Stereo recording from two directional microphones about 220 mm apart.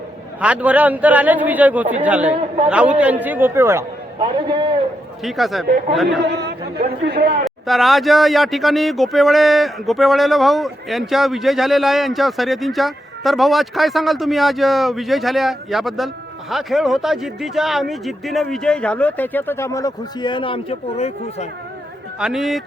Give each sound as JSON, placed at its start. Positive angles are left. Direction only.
{"t": 0.3, "sound": "a man's voice", "side_deg": -5}
{"t": 5.2, "sound": "speech", "side_deg": 0}
{"t": 6.4, "sound": "speech", "side_deg": -50}
{"t": 7.4, "sound": "speech", "side_deg": 0}
{"t": 22.2, "sound": "speech", "side_deg": 0}